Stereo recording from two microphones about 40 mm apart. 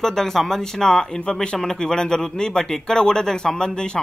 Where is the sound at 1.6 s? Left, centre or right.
Centre.